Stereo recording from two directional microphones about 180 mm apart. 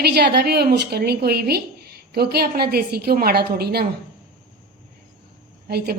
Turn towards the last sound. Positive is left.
turn(degrees=-60)  # may be behind; listen again after turning